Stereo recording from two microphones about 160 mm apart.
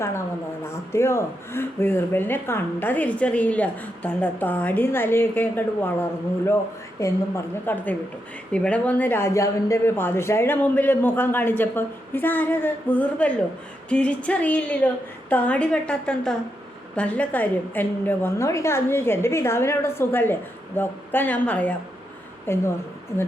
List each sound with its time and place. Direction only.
0.6 s a woman's voice: 15° left (ahead or behind)